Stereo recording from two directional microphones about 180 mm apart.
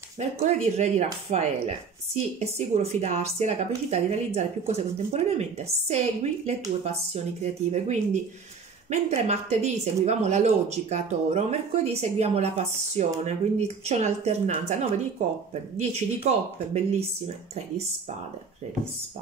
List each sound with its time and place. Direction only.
0.2 s speech: 40° right (ahead or behind)
7.7 s speech: 40° right (ahead or behind)
15.8 s speech: 35° right (ahead or behind)